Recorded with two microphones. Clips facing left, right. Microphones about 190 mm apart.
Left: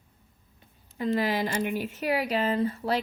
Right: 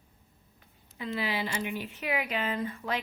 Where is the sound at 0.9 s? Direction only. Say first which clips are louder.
Left 6 dB; 45° left (ahead or behind).